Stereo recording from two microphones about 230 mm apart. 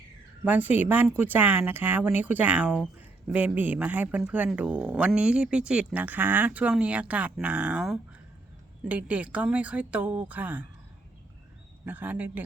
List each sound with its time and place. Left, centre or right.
0.4 s speech: centre
11.9 s speech: centre